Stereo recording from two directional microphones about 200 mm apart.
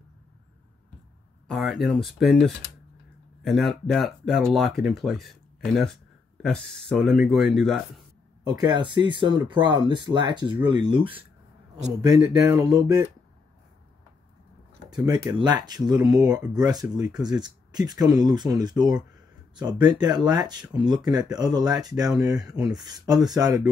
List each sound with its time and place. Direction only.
1.5 s speech: centre (ahead or behind)
8.5 s speech: 20° right (ahead or behind)
15.0 s speech: 20° right (ahead or behind)